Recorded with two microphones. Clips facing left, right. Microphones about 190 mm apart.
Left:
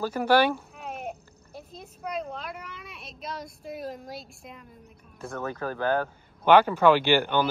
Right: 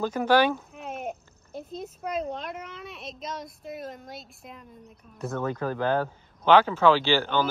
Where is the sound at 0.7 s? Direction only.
Centre (ahead or behind).